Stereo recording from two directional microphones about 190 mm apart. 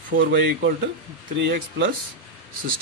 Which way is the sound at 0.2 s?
70° right (ahead or behind).